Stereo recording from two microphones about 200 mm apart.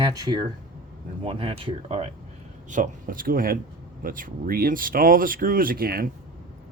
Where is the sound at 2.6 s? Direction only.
40° right (ahead or behind).